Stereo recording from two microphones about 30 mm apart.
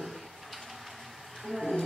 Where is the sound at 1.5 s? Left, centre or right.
Centre.